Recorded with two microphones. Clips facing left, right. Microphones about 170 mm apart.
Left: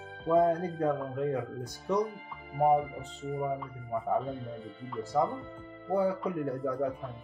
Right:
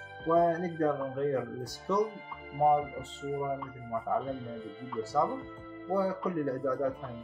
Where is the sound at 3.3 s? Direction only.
Centre (ahead or behind).